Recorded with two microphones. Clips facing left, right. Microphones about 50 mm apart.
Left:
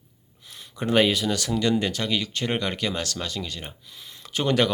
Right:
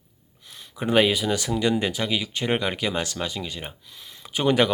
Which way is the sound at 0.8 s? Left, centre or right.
Centre.